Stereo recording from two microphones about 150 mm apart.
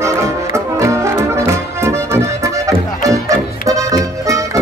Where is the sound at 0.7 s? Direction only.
20° right (ahead or behind).